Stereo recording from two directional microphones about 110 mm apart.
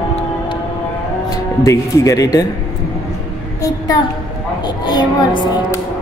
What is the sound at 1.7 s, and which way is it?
Speech, 30° left (ahead or behind).